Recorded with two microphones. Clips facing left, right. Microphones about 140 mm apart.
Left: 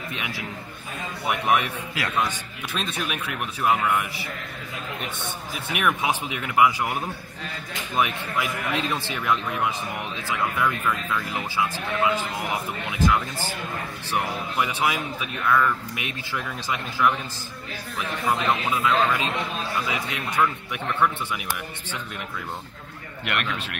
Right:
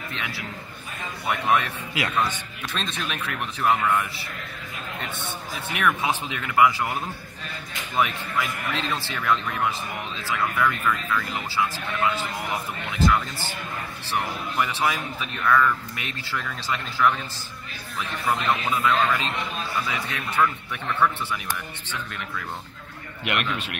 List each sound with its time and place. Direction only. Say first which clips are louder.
0.1 s speech: left 1 dB; 15° left (ahead or behind)
18.2 s speech: left 1 dB; 15° left (ahead or behind)
23.2 s a man's voice: right 1 dB; 10° right (ahead or behind)